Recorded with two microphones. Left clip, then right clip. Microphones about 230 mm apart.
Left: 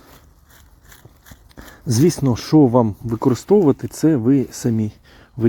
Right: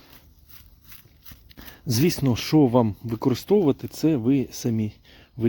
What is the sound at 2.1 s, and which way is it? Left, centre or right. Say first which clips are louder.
Speech: left 5 dB; centre.